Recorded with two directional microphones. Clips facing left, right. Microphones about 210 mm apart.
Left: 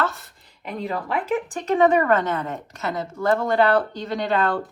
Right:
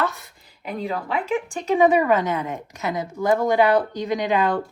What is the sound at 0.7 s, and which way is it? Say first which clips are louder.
Speech: even; centre (ahead or behind).